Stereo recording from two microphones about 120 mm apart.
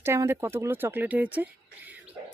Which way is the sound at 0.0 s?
20° right (ahead or behind).